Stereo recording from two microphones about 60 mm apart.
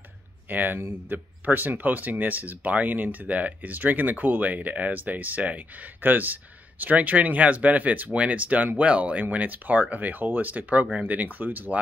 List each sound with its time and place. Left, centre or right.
0.5 s speech: right